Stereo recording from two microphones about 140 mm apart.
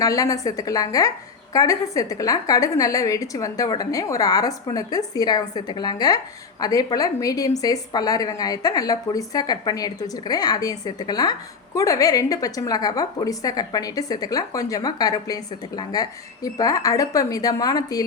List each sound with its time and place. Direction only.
0.0 s a woman's voice: 25° left (ahead or behind)